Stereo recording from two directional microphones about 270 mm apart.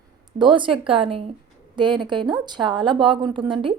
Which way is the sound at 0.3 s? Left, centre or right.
Centre.